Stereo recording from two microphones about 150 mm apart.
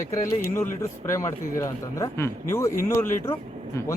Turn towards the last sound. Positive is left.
turn(degrees=15)  # may be behind; listen again after turning